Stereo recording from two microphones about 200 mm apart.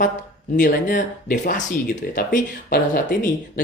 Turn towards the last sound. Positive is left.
turn(degrees=45)  # may be behind; listen again after turning